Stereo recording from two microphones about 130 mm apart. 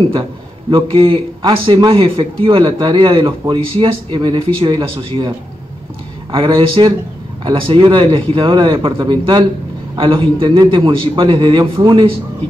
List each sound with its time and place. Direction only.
0.7 s a man's voice: 40° right (ahead or behind)
6.3 s a man's voice: 40° right (ahead or behind)